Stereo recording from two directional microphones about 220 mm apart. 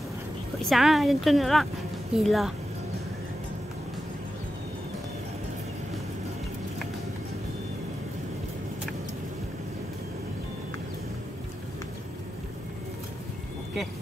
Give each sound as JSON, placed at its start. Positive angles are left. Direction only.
{"t": 0.6, "sound": "a woman's voice", "side_deg": 0}